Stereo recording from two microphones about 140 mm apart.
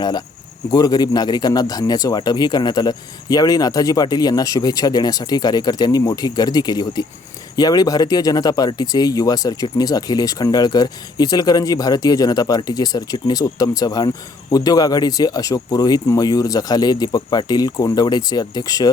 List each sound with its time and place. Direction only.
0.0 s speech: 30° left (ahead or behind)